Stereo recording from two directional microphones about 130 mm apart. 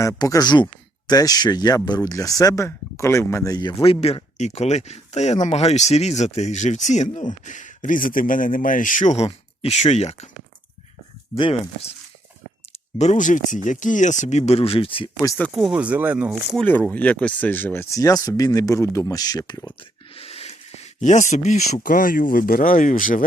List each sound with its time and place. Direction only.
0.2 s speech: 30° left (ahead or behind); by 10.2 s 55° left (ahead or behind)
11.3 s speech: 40° left (ahead or behind)
13.0 s speech: 70° left (ahead or behind); by 15.1 s 45° left (ahead or behind)
15.5 s speech: 5° right (ahead or behind)
16.6 s speech: 15° left (ahead or behind); by 19.7 s 30° left (ahead or behind)
20.1 s speech: 50° left (ahead or behind); by 23.2 s 90° left